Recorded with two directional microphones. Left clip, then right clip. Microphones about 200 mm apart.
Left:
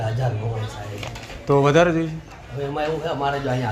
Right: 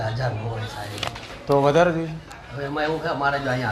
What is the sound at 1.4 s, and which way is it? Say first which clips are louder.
Speech: left 1 dB; 45° left (ahead or behind).